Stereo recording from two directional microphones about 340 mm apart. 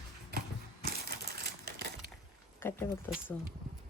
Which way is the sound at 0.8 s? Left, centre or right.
Right.